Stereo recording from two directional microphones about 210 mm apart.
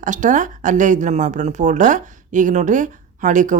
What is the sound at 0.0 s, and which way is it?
A woman's voice, 35° right (ahead or behind).